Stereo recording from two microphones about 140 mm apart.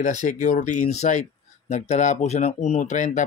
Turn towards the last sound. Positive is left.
turn(degrees=60)  # may be behind; listen again after turning